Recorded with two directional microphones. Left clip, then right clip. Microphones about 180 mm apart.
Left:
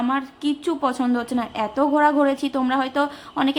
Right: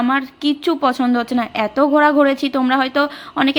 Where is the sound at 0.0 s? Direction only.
25° right (ahead or behind).